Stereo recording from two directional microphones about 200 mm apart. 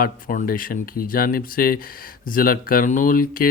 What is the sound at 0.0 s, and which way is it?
Speech, 45° left (ahead or behind).